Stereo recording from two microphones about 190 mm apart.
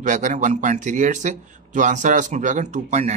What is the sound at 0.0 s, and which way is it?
A man's voice, 40° right (ahead or behind).